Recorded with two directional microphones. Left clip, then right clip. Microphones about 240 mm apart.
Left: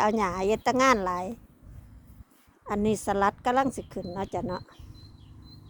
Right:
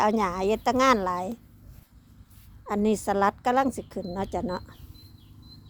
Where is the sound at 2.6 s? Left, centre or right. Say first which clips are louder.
Right 2 dB; centre.